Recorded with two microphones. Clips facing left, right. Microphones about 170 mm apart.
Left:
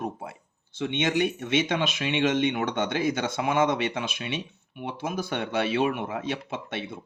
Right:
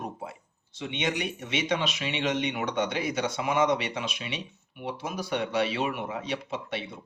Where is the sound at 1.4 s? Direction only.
50° left (ahead or behind).